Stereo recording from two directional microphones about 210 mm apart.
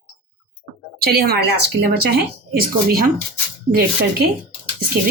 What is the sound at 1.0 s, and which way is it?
Speech, 50° right (ahead or behind).